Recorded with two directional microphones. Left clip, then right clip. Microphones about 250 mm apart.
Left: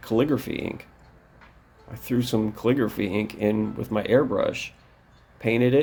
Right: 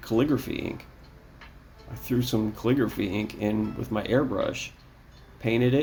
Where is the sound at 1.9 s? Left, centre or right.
Centre.